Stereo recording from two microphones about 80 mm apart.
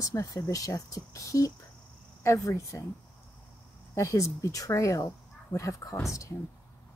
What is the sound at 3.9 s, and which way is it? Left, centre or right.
A woman's voice, left.